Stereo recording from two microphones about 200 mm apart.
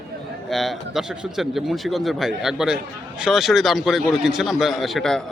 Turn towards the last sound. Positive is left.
turn(degrees=0)  # may be behind; listen again after turning